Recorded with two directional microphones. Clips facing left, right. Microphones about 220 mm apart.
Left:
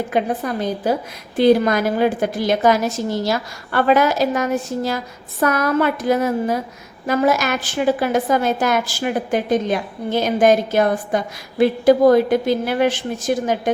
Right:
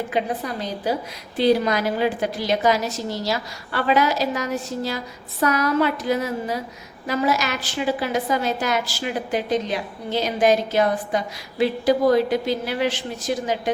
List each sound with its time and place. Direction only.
0.1 s a woman's voice: 50° left (ahead or behind)